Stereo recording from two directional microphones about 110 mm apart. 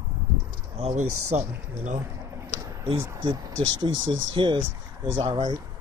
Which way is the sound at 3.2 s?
45° right (ahead or behind).